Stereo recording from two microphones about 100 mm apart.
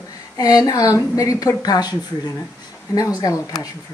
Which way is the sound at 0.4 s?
40° left (ahead or behind).